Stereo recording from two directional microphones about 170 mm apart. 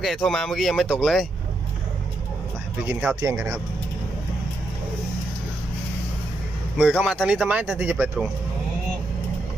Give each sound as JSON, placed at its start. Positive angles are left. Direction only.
{"t": 0.0, "sound": "speech", "side_deg": 0}
{"t": 2.8, "sound": "speech", "side_deg": -5}
{"t": 3.2, "sound": "speech", "side_deg": -15}
{"t": 6.7, "sound": "speech", "side_deg": -5}